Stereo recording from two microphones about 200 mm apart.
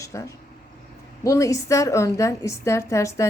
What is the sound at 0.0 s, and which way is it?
A woman's voice, 15° left (ahead or behind).